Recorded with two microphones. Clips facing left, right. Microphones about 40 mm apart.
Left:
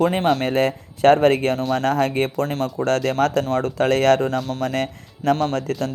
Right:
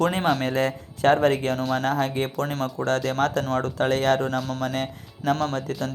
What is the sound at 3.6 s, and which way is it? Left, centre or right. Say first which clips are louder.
Speech: left 6 dB; left.